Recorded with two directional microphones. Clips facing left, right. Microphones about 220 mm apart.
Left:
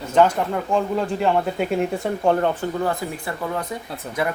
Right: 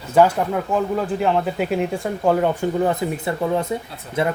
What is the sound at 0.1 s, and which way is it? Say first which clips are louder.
Speech: right 2 dB; 5° right (ahead or behind).